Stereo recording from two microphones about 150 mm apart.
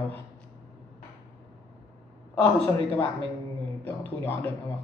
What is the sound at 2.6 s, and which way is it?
A man's voice, 15° left (ahead or behind).